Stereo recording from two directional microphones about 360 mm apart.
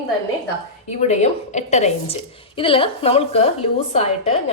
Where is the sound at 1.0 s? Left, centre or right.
Centre.